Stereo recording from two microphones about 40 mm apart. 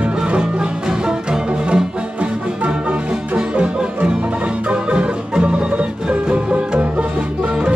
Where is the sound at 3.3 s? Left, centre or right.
Right.